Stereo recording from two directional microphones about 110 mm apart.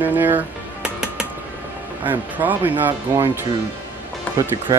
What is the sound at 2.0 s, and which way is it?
Speech, 15° right (ahead or behind).